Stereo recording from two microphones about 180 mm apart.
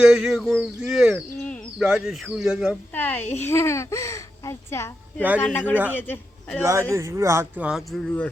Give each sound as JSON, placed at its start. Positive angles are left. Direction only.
{"t": 0.0, "sound": "speech", "side_deg": -5}
{"t": 2.9, "sound": "a woman's voice", "side_deg": 10}
{"t": 6.6, "sound": "speech", "side_deg": -15}